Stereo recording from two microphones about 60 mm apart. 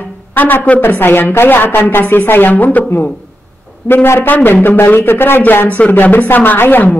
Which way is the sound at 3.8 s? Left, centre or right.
Left.